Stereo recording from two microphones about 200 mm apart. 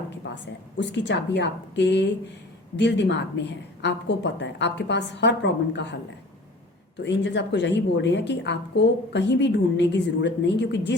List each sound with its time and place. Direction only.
0.2 s a sound: 60° left (ahead or behind)
0.8 s a woman's voice: 60° left (ahead or behind)
7.0 s a woman's voice: 60° left (ahead or behind)